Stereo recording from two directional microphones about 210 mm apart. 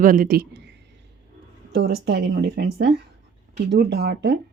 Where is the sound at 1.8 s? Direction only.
50° right (ahead or behind).